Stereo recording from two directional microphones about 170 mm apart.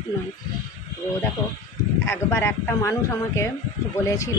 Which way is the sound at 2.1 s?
15° left (ahead or behind).